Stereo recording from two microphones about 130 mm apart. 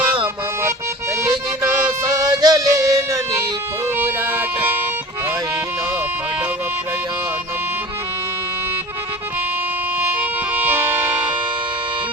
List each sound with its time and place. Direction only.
2.1 s music: 30° right (ahead or behind)
3.9 s music: 15° right (ahead or behind)
10.2 s music: 10° right (ahead or behind)